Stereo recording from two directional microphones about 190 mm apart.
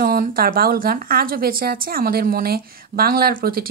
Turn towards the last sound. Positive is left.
turn(degrees=-50)  # may be behind; listen again after turning